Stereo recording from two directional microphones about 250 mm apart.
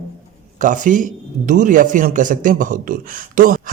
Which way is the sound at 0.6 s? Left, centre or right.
Right.